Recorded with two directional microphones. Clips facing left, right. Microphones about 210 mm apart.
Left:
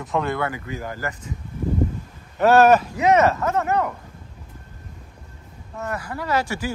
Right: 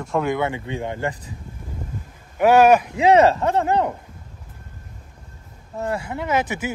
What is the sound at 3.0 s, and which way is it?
Speech, 30° right (ahead or behind).